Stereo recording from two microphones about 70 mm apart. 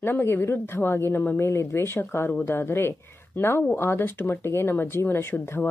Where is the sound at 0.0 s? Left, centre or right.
Left.